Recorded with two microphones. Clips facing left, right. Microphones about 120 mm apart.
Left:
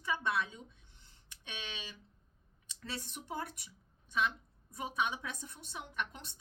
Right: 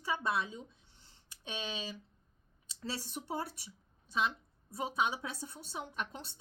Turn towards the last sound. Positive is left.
turn(degrees=-35)  # may be behind; listen again after turning